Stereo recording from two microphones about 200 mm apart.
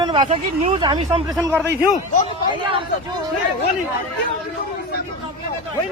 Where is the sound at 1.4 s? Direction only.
10° right (ahead or behind).